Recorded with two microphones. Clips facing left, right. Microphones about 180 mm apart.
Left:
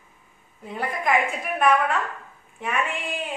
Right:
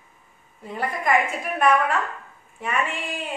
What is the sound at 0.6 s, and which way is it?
A woman's voice, centre (ahead or behind).